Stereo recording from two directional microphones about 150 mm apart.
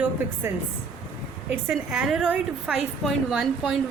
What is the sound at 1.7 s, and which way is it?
A woman's voice, 5° right (ahead or behind).